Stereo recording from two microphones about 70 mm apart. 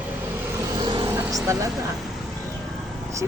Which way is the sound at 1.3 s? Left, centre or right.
Right.